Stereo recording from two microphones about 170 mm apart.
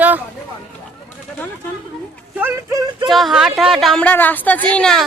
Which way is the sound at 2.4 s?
15° right (ahead or behind).